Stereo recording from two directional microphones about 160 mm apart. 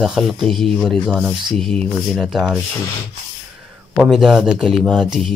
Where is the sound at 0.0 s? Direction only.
Centre (ahead or behind).